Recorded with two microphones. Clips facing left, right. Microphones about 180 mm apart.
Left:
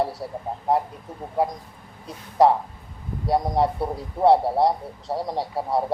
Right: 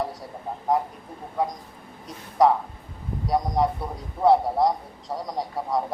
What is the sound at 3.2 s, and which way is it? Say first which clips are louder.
A man's voice: left 2 dB; 25° left (ahead or behind).